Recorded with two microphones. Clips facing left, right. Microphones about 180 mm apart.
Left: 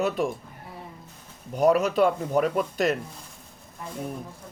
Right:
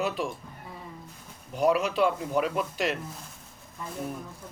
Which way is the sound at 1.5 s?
45° left (ahead or behind).